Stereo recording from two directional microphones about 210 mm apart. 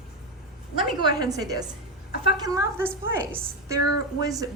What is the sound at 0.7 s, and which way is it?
A woman's voice, 20° right (ahead or behind).